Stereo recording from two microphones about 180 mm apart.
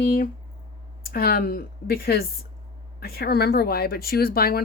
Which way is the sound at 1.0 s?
55° left (ahead or behind).